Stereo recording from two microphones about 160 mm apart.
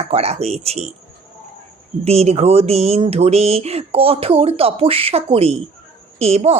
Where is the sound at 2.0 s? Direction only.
40° right (ahead or behind).